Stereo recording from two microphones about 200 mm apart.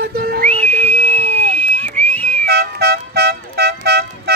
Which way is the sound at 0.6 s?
10° left (ahead or behind).